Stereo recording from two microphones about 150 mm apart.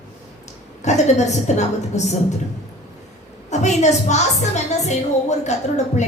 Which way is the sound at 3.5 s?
50° left (ahead or behind).